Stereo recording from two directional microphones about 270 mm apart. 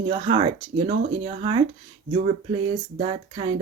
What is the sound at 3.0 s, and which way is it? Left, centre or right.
Speech, centre.